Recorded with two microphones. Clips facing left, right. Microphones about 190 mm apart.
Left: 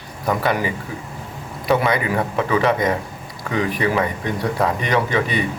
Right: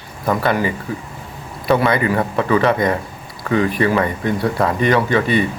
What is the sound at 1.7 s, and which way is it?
Speech, 15° left (ahead or behind).